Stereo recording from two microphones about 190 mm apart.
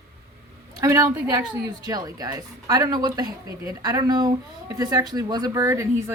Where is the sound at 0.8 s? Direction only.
15° right (ahead or behind).